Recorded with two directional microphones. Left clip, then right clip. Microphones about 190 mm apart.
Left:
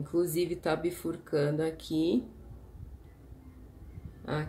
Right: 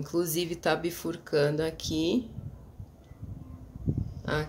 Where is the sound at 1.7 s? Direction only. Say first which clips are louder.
Right 1 dB; 30° right (ahead or behind).